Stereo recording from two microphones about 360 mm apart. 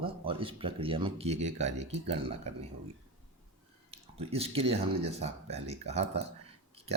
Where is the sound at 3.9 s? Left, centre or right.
Centre.